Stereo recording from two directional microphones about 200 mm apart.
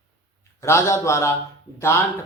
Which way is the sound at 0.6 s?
15° left (ahead or behind).